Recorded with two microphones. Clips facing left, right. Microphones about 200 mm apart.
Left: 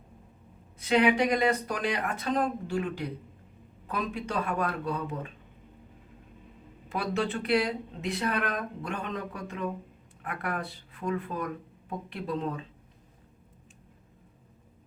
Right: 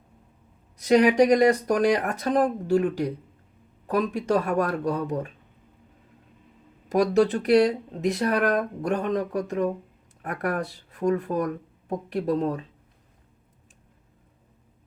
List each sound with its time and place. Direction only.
0.8 s speech: 45° right (ahead or behind)
6.8 s speech: 40° right (ahead or behind)